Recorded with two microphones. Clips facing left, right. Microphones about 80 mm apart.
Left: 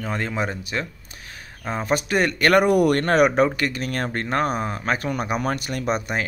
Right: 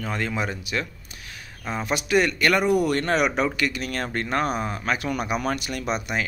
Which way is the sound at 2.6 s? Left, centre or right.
Left.